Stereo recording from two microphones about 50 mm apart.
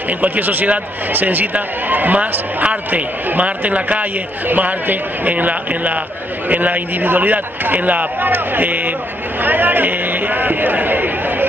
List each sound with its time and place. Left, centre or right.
0.2 s a man's voice: right